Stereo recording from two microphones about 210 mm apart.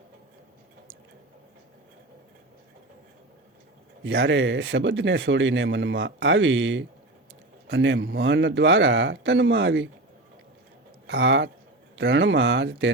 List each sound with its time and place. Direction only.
4.0 s speech: 65° right (ahead or behind)
11.0 s speech: 60° right (ahead or behind)